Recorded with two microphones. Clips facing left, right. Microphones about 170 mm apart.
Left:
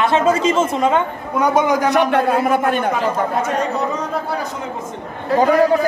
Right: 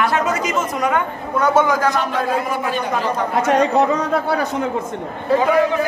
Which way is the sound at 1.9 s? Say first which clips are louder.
Left 5 dB; 60° left (ahead or behind).